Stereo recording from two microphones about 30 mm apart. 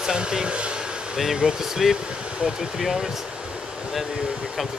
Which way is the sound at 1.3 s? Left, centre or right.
Centre.